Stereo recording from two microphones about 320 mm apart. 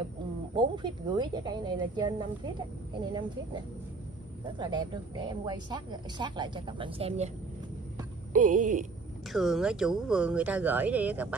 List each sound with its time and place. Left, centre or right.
0.6 s a woman's voice: centre
8.3 s speech: right
9.3 s speech: centre